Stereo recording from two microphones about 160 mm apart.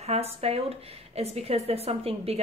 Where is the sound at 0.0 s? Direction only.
40° right (ahead or behind).